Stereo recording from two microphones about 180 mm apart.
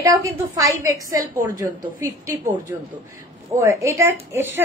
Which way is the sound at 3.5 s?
15° right (ahead or behind).